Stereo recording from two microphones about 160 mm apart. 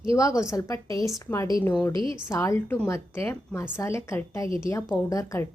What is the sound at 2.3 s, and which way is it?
A woman's voice, 15° left (ahead or behind).